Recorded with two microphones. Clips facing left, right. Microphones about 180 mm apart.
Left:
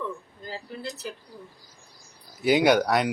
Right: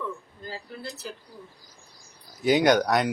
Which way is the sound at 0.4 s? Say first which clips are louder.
Left 2 dB; 15° left (ahead or behind).